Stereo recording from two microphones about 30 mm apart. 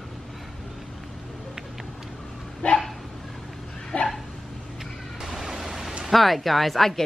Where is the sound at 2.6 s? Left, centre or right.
Left.